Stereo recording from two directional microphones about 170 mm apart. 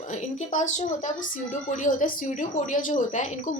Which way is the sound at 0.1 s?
45° left (ahead or behind).